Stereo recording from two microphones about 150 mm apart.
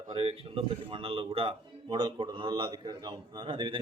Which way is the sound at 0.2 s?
40° right (ahead or behind).